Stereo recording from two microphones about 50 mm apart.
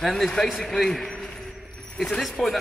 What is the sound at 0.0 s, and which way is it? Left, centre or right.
A man's voice, centre.